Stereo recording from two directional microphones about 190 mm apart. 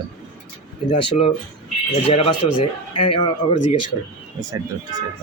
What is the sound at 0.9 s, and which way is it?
Speech, 30° left (ahead or behind).